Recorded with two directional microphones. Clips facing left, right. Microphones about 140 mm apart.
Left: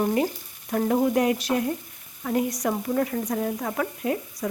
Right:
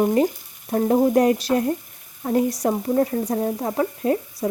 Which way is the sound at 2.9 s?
30° right (ahead or behind).